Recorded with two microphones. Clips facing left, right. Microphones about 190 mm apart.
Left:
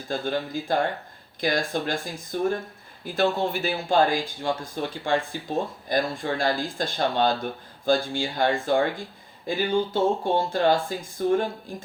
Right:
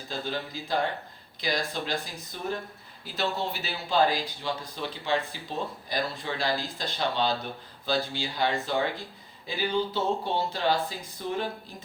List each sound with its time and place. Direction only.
0.1 s speech: 50° left (ahead or behind)